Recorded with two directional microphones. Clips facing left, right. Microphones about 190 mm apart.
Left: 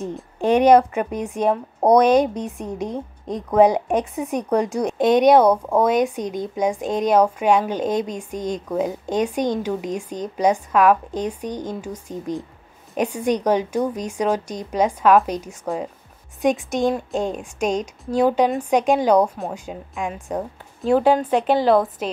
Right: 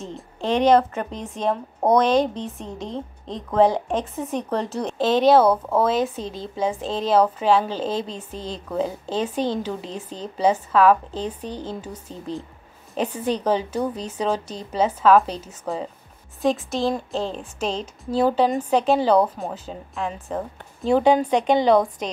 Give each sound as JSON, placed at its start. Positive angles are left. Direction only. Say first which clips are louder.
{"t": 0.0, "sound": "a woman's voice", "louder": "left 6 dB", "side_deg": 15}